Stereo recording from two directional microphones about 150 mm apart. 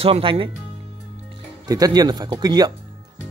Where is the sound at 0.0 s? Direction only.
35° right (ahead or behind).